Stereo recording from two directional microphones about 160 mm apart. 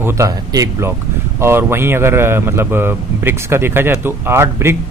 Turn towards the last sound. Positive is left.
turn(degrees=-15)  # may be behind; listen again after turning